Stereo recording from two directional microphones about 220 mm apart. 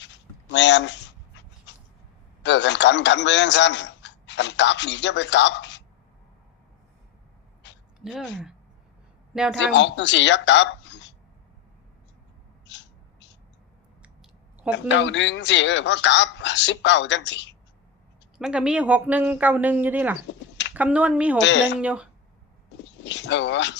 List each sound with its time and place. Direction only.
0.0 s a sound: 55° left (ahead or behind)
2.4 s a man's voice: 55° left (ahead or behind)
7.9 s speech: centre (ahead or behind)
9.3 s speech: 5° right (ahead or behind)
9.7 s speech: 55° left (ahead or behind)
12.6 s owl: 55° left (ahead or behind)
14.0 s a sound: 5° right (ahead or behind)
14.8 s speech: 55° left (ahead or behind)
18.3 s speech: 5° right (ahead or behind)
20.2 s a sound: 55° left (ahead or behind)
20.7 s speech: 5° right (ahead or behind)
21.4 s speech: 55° left (ahead or behind)
21.8 s speech: 5° right (ahead or behind)
22.8 s speech: 55° left (ahead or behind)